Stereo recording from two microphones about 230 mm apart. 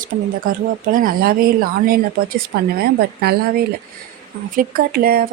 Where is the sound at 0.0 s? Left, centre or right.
Right.